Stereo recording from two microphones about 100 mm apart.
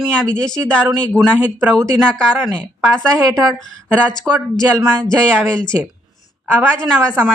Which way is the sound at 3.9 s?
15° right (ahead or behind).